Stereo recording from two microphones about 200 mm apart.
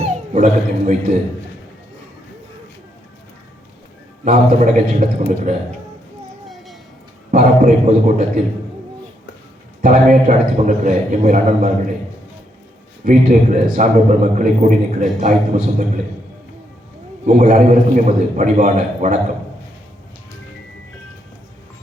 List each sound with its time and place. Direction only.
0.0 s speech: 40° right (ahead or behind)
4.3 s a man's voice: 40° right (ahead or behind)
7.3 s a man's voice: 40° right (ahead or behind)
9.8 s a man's voice: 40° right (ahead or behind)
13.1 s a man's voice: 40° right (ahead or behind)
17.2 s a man's voice: 35° right (ahead or behind)